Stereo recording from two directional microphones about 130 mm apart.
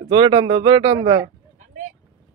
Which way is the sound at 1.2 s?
70° right (ahead or behind).